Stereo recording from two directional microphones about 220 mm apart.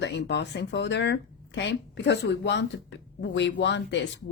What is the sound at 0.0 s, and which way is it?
Speech, 50° left (ahead or behind).